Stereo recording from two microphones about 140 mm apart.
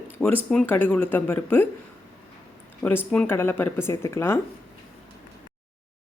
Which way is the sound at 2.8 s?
10° left (ahead or behind).